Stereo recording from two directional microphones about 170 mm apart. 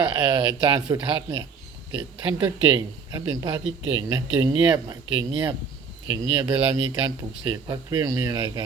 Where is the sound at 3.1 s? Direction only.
20° right (ahead or behind).